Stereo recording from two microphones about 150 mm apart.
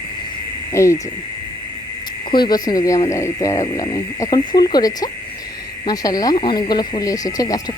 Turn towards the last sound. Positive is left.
turn(degrees=25)  # may be behind; listen again after turning